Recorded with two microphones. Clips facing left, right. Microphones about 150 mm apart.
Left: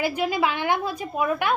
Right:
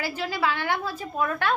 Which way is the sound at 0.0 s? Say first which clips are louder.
Left 4 dB; 15° left (ahead or behind).